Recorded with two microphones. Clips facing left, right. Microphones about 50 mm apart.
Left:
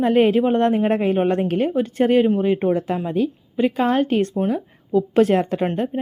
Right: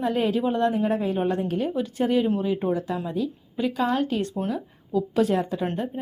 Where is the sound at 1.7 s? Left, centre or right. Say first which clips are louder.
Left 6 dB; left.